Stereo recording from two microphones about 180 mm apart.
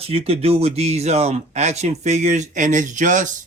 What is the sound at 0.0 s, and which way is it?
Speech, 35° right (ahead or behind).